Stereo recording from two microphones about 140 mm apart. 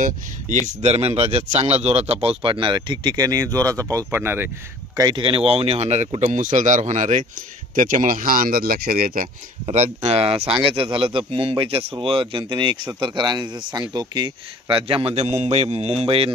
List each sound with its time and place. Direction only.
0.7 s speech: 55° right (ahead or behind)
2.2 s speech: 40° right (ahead or behind); by 4.5 s 15° right (ahead or behind)
4.9 s speech: 30° right (ahead or behind)
5.2 s speech: 40° right (ahead or behind); by 7.2 s 60° right (ahead or behind)
7.7 s speech: 70° right (ahead or behind); by 9.3 s 90° right
9.7 s speech: 50° right (ahead or behind)